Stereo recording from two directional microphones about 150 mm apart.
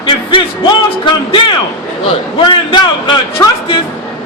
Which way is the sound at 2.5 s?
30° left (ahead or behind).